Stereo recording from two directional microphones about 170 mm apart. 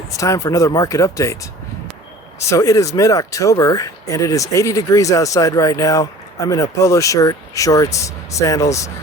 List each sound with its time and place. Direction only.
0.1 s speech: 20° left (ahead or behind)
2.5 s speech: 20° left (ahead or behind)